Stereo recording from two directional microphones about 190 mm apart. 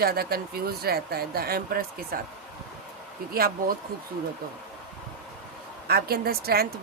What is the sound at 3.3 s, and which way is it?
Speech, 50° right (ahead or behind).